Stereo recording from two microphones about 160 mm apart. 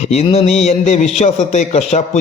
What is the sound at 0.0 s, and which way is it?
A man's voice, 40° left (ahead or behind).